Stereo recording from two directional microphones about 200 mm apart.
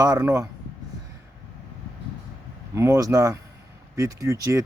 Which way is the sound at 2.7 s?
15° right (ahead or behind).